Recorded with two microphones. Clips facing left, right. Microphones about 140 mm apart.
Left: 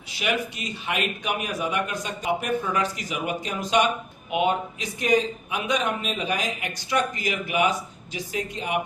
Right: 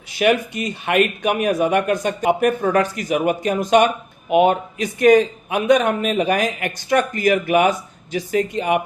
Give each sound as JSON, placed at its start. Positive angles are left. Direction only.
{"t": 0.2, "sound": "a man's voice", "side_deg": -55}